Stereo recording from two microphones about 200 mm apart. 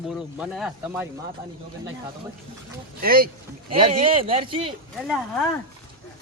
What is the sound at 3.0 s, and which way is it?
Speech, 45° right (ahead or behind).